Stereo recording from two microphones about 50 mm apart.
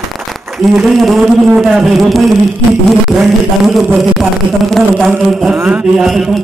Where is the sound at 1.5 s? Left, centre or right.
Centre.